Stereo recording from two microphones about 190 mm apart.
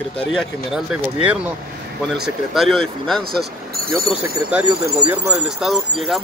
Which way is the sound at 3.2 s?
50° right (ahead or behind).